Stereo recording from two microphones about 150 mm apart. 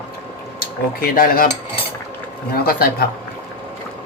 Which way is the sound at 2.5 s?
90° left.